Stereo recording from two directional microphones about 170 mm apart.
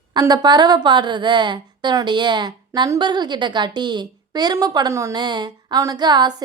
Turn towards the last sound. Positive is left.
turn(degrees=-25)  # may be behind; listen again after turning